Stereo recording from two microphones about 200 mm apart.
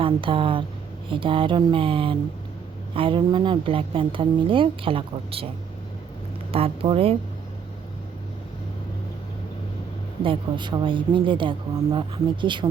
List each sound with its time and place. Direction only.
0.0 s a woman's voice: 25° right (ahead or behind)
6.5 s a woman's voice: 30° right (ahead or behind)
10.2 s a woman's voice: 25° right (ahead or behind)